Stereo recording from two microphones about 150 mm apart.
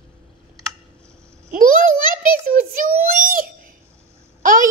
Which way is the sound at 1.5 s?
65° right (ahead or behind).